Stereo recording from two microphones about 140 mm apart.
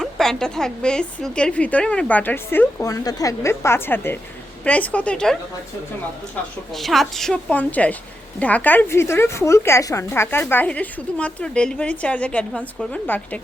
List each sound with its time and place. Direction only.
0.0 s a woman's voice: 5° left (ahead or behind)
2.8 s a woman's voice: 25° left (ahead or behind)